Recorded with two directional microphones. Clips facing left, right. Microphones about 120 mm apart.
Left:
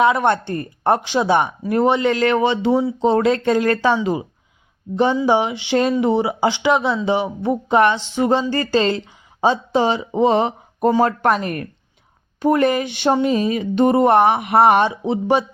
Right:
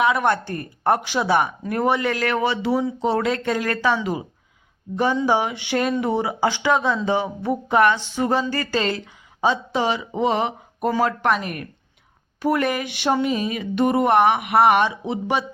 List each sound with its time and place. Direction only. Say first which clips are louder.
0.0 s speech: left 3 dB; 30° left (ahead or behind)
5.2 s speech: left 3 dB; 20° left (ahead or behind)